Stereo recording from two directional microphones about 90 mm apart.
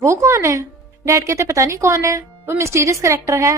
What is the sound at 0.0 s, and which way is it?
A woman's voice, 35° right (ahead or behind).